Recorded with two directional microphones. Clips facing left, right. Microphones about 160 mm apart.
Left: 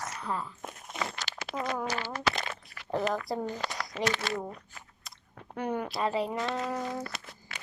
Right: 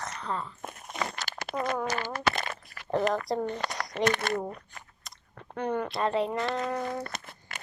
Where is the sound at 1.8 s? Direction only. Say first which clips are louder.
Right 2 dB; 50° right (ahead or behind).